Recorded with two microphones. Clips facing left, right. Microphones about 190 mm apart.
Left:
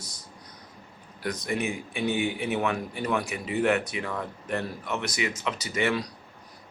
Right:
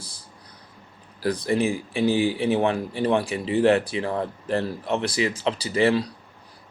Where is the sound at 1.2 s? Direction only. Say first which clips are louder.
Right 7 dB; 30° right (ahead or behind).